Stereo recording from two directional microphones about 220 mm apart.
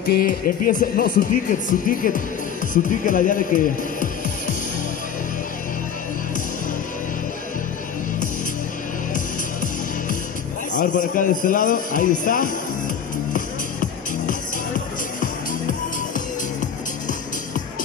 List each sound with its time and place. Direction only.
0.0 s speech: 40° left (ahead or behind)
10.7 s speech: 35° left (ahead or behind)
13.3 s music: 35° left (ahead or behind)